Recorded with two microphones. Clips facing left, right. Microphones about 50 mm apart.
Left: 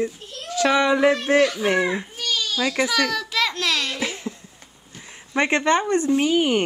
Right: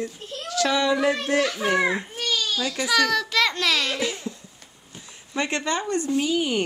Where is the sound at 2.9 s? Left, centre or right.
Centre.